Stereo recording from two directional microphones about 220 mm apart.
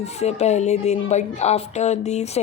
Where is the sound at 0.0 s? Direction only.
30° left (ahead or behind).